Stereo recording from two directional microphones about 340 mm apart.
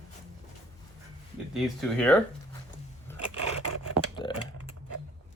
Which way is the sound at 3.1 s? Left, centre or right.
Right.